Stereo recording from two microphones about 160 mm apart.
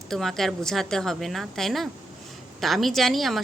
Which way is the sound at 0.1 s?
Centre (ahead or behind).